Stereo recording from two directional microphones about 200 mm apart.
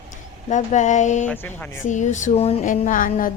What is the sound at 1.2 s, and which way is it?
Speech, 10° left (ahead or behind).